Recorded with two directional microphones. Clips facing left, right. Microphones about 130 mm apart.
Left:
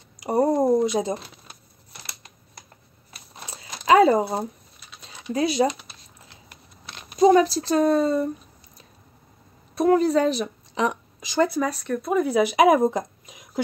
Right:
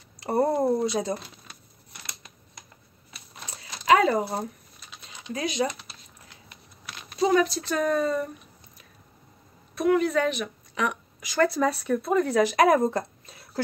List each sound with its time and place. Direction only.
0.2 s speech: 15° left (ahead or behind)
3.8 s speech: 30° left (ahead or behind)
5.0 s a sound: 35° left (ahead or behind)
7.2 s speech: 35° left (ahead or behind)
9.8 s speech: 35° left (ahead or behind)
11.7 s speech: 5° right (ahead or behind); by 13.5 s 15° left (ahead or behind)